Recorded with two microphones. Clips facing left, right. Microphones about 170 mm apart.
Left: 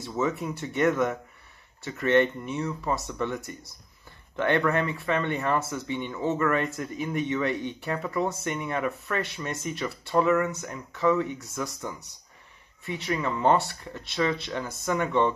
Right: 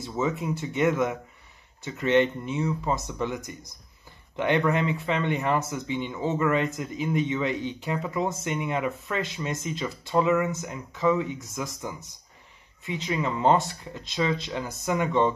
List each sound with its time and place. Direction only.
0.0 s speech: 10° right (ahead or behind)